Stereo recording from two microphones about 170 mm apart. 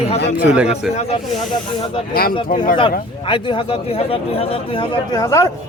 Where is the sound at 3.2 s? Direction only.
30° left (ahead or behind).